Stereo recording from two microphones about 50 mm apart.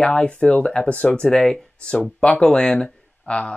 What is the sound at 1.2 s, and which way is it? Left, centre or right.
Speech, centre.